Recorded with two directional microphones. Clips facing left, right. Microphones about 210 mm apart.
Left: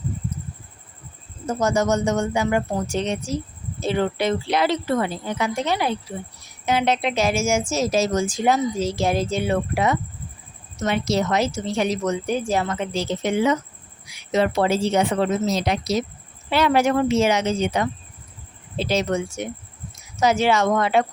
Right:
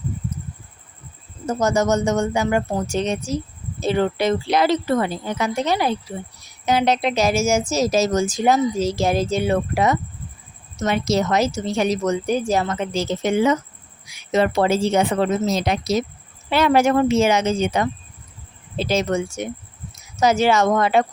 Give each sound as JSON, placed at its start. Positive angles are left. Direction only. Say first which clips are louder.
{"t": 1.6, "sound": "a woman's voice", "louder": "right 2 dB", "side_deg": -45}
{"t": 18.9, "sound": "a woman's voice", "louder": "right 2 dB", "side_deg": -45}